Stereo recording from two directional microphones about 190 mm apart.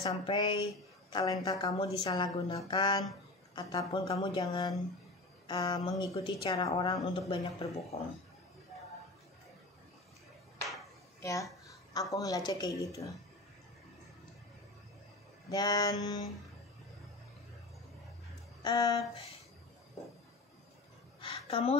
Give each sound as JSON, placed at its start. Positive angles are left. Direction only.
{"t": 0.0, "sound": "a woman's voice", "side_deg": 25}
{"t": 11.1, "sound": "a woman's voice", "side_deg": 15}
{"t": 15.5, "sound": "a woman's voice", "side_deg": 20}
{"t": 18.6, "sound": "speech", "side_deg": 20}
{"t": 21.2, "sound": "a sound", "side_deg": 25}